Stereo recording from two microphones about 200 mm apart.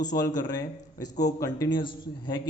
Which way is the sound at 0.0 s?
20° left (ahead or behind).